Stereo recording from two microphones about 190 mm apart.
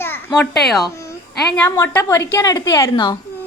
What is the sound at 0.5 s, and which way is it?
Speech, centre (ahead or behind).